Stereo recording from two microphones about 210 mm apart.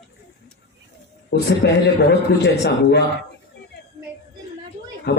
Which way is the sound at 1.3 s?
55° left (ahead or behind).